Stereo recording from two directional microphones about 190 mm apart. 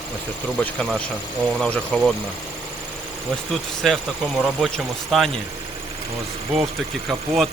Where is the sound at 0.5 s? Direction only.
5° left (ahead or behind).